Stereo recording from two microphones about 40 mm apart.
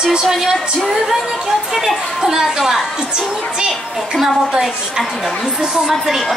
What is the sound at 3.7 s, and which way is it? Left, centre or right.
Speech, centre.